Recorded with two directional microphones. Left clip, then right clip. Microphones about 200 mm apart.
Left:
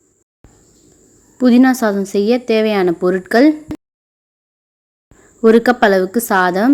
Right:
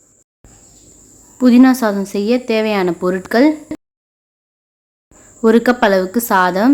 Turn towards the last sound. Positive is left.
turn(degrees=15)  # may be behind; listen again after turning